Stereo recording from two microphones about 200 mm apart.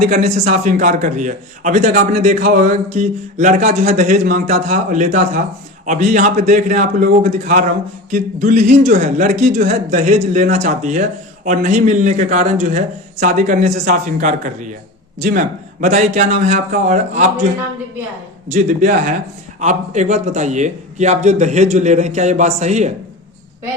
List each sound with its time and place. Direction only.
0.0 s a man's voice: 35° right (ahead or behind)
18.5 s a man's voice: 40° right (ahead or behind)